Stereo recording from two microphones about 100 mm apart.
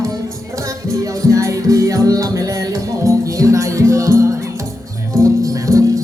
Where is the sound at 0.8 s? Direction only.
30° right (ahead or behind).